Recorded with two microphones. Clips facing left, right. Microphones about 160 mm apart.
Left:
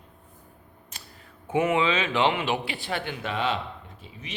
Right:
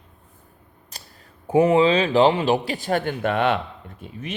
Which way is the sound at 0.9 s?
40° right (ahead or behind).